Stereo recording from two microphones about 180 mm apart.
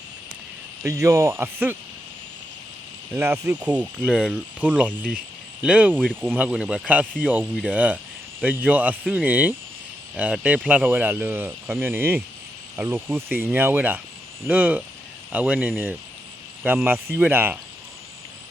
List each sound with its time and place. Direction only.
0.9 s speech: 15° right (ahead or behind)
3.2 s speech: 15° right (ahead or behind)
5.9 s speech: 5° left (ahead or behind)